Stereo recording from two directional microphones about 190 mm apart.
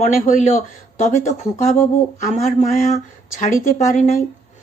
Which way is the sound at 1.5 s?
40° left (ahead or behind).